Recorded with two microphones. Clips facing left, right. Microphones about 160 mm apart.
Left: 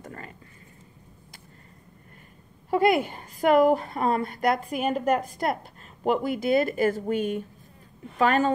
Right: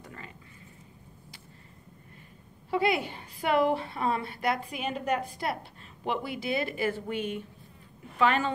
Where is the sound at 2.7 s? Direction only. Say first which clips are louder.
Left 6 dB; 45° left (ahead or behind).